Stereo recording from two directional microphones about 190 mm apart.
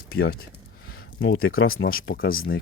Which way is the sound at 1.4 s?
90° left.